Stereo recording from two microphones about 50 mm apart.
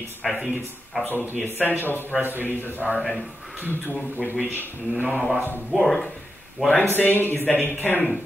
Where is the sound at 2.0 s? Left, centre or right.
Right.